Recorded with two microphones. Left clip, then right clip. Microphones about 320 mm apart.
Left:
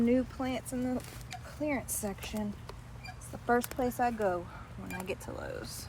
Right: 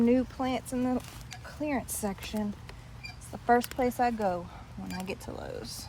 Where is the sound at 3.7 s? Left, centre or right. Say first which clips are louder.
Right 3 dB; right.